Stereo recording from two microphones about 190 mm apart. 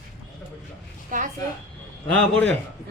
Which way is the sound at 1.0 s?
45° right (ahead or behind).